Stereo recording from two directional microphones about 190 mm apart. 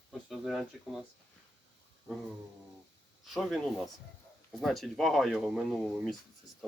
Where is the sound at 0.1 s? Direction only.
Centre (ahead or behind).